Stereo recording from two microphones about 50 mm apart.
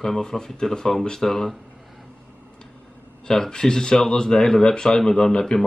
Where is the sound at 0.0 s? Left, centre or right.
Centre.